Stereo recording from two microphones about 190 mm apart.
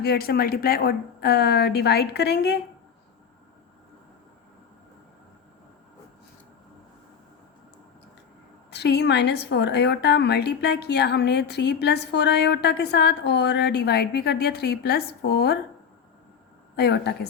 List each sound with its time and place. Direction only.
0.0 s a woman's voice: 55° left (ahead or behind)
8.7 s a woman's voice: 60° left (ahead or behind)
16.7 s a woman's voice: 60° left (ahead or behind)